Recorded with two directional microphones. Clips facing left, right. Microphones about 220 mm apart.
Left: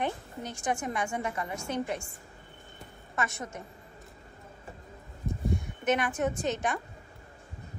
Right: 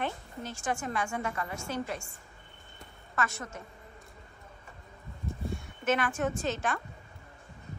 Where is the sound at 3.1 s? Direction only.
20° left (ahead or behind).